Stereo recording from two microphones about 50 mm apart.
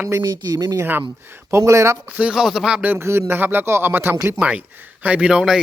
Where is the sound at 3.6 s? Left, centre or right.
Right.